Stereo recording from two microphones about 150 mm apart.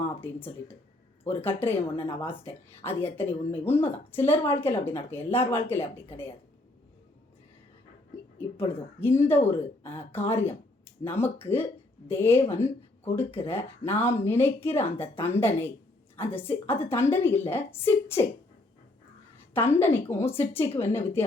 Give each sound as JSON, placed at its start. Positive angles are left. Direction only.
{"t": 0.2, "sound": "a woman's voice", "side_deg": 15}
{"t": 8.4, "sound": "a woman's voice", "side_deg": 15}
{"t": 19.5, "sound": "a woman's voice", "side_deg": 15}